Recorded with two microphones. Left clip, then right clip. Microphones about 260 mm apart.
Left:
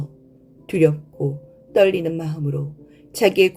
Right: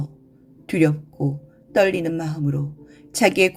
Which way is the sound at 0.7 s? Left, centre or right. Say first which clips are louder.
Left 3 dB; right.